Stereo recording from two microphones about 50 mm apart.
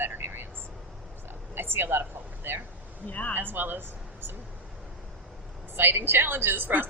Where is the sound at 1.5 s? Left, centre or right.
Right.